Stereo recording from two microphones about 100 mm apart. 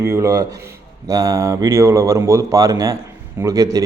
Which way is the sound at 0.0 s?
30° right (ahead or behind).